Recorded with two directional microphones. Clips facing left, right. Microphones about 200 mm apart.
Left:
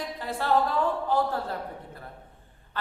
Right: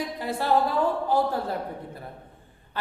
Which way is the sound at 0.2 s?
10° right (ahead or behind).